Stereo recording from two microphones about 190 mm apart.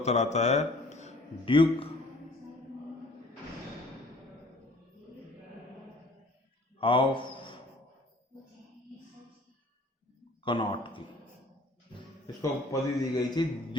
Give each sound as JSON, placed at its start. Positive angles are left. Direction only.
{"t": 0.0, "sound": "a man's voice", "side_deg": 35}
{"t": 6.7, "sound": "a sound", "side_deg": 25}
{"t": 10.4, "sound": "speech", "side_deg": 25}
{"t": 12.4, "sound": "a man's voice", "side_deg": 20}